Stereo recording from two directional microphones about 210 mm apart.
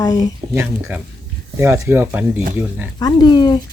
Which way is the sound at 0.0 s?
20° left (ahead or behind).